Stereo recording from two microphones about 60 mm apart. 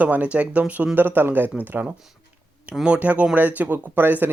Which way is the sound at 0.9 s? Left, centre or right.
Right.